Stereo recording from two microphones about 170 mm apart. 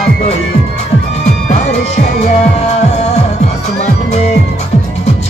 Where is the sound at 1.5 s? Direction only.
40° left (ahead or behind).